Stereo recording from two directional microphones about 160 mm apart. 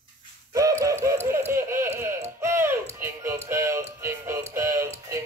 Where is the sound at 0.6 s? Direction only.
20° right (ahead or behind).